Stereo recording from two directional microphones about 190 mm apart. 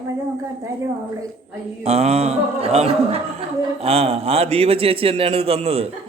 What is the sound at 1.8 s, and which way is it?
Speech, 35° right (ahead or behind).